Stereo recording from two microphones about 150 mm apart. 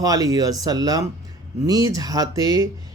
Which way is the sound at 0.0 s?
25° right (ahead or behind).